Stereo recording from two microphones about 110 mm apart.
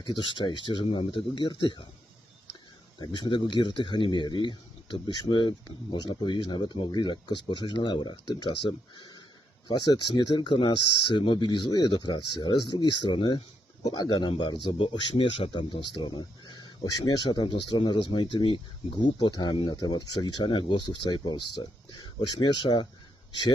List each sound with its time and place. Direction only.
0.3 s speech: 45° left (ahead or behind)
3.0 s speech: 40° left (ahead or behind)
9.0 s a sound: 40° left (ahead or behind)
9.6 s speech: 35° left (ahead or behind)